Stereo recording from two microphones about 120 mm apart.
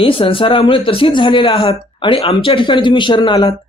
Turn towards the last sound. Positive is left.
turn(degrees=40)  # may be behind; listen again after turning